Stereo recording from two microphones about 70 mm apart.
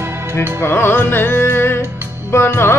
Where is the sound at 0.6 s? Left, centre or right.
Left.